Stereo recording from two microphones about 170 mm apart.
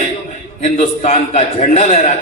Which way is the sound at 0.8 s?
35° left (ahead or behind).